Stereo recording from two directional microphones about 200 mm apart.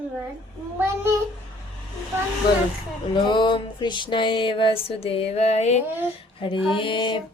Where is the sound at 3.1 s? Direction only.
25° left (ahead or behind).